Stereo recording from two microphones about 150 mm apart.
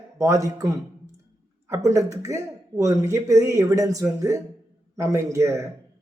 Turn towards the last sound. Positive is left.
turn(degrees=-20)  # may be behind; listen again after turning